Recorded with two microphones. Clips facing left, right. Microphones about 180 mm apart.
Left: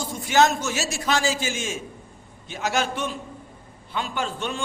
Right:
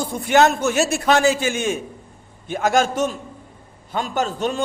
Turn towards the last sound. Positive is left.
turn(degrees=-40)  # may be behind; listen again after turning